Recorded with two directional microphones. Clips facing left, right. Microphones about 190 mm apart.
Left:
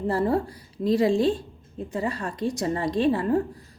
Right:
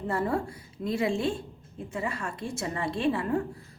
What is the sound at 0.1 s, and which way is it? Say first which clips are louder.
A woman's voice: left 4 dB; 30° left (ahead or behind).